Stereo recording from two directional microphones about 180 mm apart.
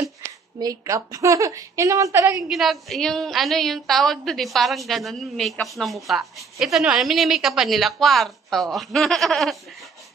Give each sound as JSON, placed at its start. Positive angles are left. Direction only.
{"t": 0.6, "sound": "a woman's voice", "side_deg": -20}
{"t": 2.5, "sound": "a woman's voice", "side_deg": 0}